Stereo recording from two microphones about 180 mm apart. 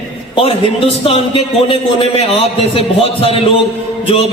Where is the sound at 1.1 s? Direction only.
30° left (ahead or behind).